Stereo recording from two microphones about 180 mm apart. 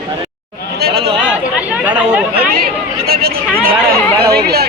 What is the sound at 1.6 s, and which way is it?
Chatter, 10° right (ahead or behind).